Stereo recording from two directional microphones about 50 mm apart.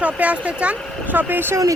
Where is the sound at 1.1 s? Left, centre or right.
Right.